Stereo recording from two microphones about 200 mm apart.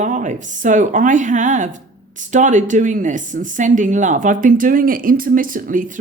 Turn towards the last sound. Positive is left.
turn(degrees=-40)  # may be behind; listen again after turning